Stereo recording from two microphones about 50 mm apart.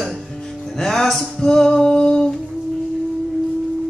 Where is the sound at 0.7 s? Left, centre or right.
Centre.